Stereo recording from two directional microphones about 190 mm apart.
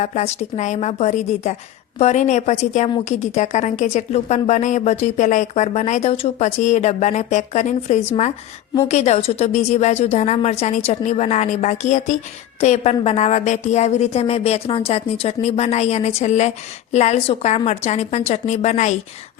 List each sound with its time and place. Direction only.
0.0 s speech: 35° left (ahead or behind)